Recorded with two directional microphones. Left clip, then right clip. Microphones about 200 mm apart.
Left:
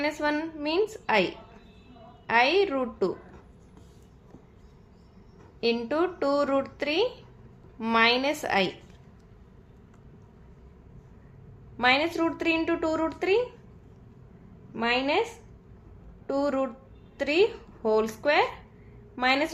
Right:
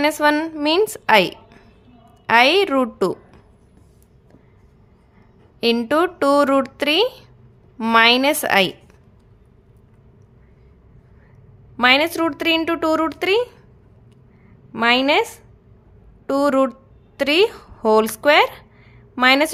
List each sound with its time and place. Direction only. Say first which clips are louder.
0.0 s speech: right 11 dB; 45° right (ahead or behind)
5.5 s speech: right 9 dB; 45° right (ahead or behind)
11.8 s speech: right 8 dB; 40° right (ahead or behind)
14.7 s a woman's voice: right 10 dB; 45° right (ahead or behind)